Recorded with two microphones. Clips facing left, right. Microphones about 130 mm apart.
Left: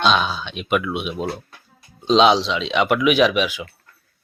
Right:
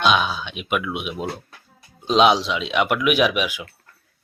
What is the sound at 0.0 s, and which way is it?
Speech, 10° right (ahead or behind).